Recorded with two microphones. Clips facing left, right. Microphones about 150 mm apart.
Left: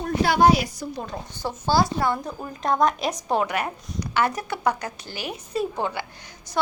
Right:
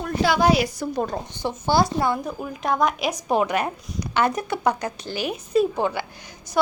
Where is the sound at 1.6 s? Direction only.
20° right (ahead or behind).